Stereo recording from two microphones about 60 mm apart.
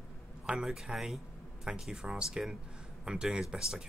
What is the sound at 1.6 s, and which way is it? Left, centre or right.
Speech, centre.